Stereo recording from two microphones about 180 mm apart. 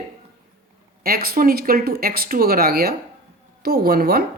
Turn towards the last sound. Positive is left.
turn(degrees=-55)  # may be behind; listen again after turning